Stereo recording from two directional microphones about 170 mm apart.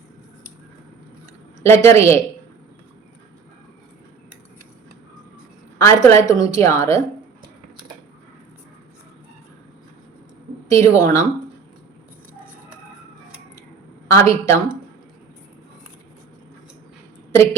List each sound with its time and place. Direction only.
1.6 s a woman's voice: 15° left (ahead or behind)
5.8 s a woman's voice: 15° left (ahead or behind)
10.7 s speech: 20° left (ahead or behind)
14.1 s a woman's voice: 20° left (ahead or behind)